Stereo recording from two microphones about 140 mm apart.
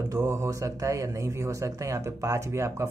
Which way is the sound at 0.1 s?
20° right (ahead or behind).